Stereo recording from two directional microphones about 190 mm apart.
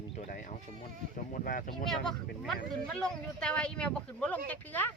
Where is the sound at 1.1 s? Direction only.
45° left (ahead or behind).